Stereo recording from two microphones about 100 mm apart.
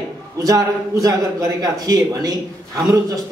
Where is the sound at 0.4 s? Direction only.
35° right (ahead or behind).